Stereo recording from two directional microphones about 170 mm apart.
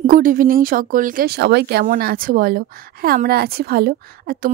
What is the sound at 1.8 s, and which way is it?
A woman's voice, 55° right (ahead or behind).